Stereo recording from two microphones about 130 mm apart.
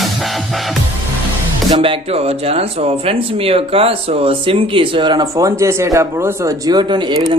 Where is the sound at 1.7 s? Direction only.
45° right (ahead or behind).